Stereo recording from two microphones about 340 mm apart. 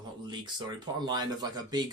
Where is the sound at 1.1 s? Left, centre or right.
Centre.